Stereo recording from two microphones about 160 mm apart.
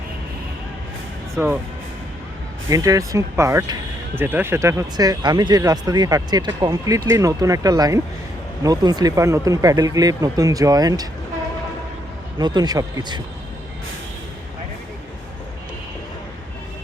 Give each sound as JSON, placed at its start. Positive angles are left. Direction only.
{"t": 2.6, "sound": "speech", "side_deg": -20}
{"t": 12.4, "sound": "speech", "side_deg": -25}